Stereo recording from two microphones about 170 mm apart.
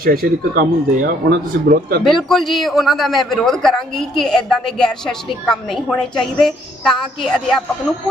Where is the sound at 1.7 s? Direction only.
65° right (ahead or behind).